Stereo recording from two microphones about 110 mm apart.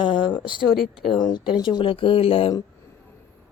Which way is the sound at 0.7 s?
Centre (ahead or behind).